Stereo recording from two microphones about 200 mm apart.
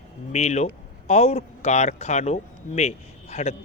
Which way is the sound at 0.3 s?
35° left (ahead or behind).